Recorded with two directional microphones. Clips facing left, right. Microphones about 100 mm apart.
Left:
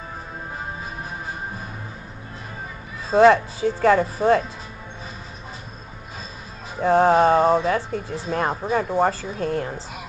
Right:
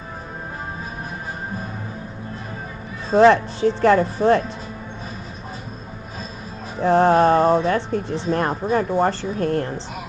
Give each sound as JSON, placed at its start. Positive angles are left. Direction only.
{"t": 3.1, "sound": "speech", "side_deg": 5}
{"t": 6.8, "sound": "speech", "side_deg": 5}